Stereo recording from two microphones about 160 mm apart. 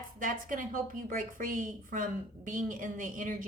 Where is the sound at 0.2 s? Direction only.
55° right (ahead or behind).